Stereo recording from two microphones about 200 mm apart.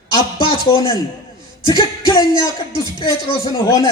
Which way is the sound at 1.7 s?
20° left (ahead or behind).